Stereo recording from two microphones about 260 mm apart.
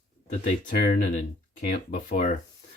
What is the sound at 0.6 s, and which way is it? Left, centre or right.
Speech, left.